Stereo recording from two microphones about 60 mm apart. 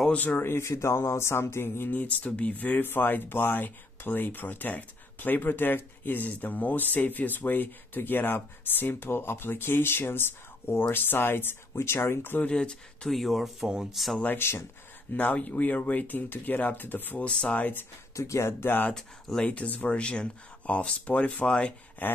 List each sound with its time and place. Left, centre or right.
0.1 s speech: left
0.4 s speech: left
1.9 s speech: left
12.4 s speech: centre
13.1 s speech: centre
14.2 s speech: left
15.1 s speech: left
17.3 s speech: centre
17.6 s speech: left
18.1 s speech: left
18.9 s speech: centre
19.4 s speech: left
22.0 s speech: left